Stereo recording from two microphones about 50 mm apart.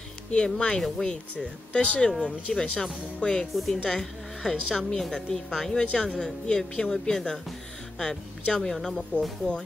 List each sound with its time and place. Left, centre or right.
0.3 s a woman's voice: centre
3.5 s a woman's voice: centre